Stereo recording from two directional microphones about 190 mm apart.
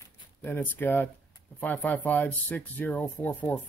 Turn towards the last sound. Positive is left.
turn(degrees=5)  # may be behind; listen again after turning